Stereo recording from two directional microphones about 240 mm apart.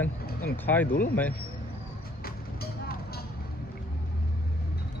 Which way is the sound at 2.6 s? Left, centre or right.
Left.